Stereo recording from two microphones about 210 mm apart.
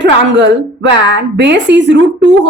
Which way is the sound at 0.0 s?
55° right (ahead or behind).